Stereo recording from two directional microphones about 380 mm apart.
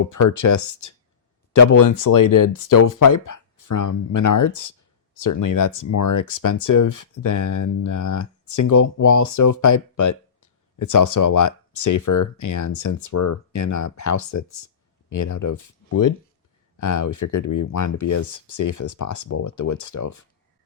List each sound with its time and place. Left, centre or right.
0.0 s speech: left